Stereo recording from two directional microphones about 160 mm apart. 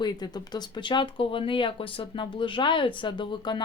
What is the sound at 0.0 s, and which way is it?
Speech, 25° left (ahead or behind).